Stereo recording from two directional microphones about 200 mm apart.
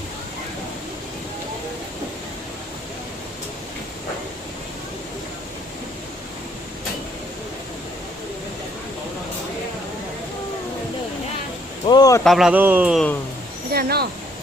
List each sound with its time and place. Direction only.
11.9 s a sound: 20° left (ahead or behind)
12.2 s a man's voice: centre (ahead or behind)
13.7 s speech: 50° right (ahead or behind)